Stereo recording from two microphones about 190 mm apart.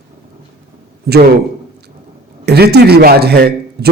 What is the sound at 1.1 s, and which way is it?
Speech, 50° right (ahead or behind).